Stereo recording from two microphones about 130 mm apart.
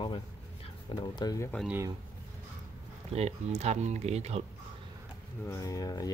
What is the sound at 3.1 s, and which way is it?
Speech, 55° right (ahead or behind).